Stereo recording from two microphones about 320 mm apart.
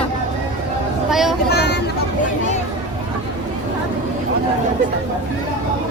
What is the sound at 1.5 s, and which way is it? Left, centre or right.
Speech, left.